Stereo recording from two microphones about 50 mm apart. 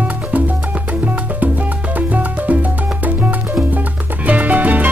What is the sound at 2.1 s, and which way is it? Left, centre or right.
Music, right.